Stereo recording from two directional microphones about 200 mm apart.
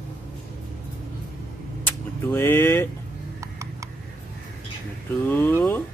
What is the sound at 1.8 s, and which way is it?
Vehicle, 10° left (ahead or behind).